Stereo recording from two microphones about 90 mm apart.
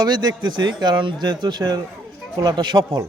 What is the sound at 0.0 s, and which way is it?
Speech, 50° right (ahead or behind).